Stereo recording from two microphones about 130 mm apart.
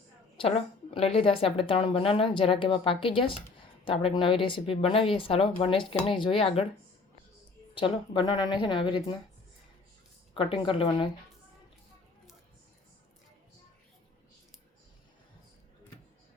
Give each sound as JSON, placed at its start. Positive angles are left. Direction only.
{"t": 0.3, "sound": "a woman's voice", "side_deg": 45}
{"t": 7.8, "sound": "a woman's voice", "side_deg": 35}
{"t": 10.3, "sound": "a woman's voice", "side_deg": 40}